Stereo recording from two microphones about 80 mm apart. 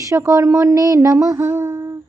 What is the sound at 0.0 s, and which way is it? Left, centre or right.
Speech, right.